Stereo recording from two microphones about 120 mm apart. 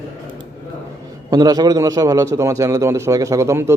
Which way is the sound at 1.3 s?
30° right (ahead or behind).